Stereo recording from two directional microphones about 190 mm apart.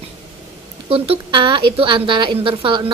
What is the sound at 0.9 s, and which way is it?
Speech, 30° right (ahead or behind).